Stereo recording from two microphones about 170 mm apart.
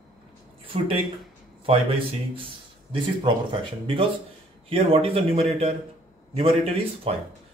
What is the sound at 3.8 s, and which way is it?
Speech, 30° right (ahead or behind).